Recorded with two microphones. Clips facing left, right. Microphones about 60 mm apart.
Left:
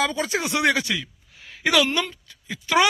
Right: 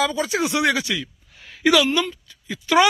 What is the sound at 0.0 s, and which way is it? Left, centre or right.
Speech, left.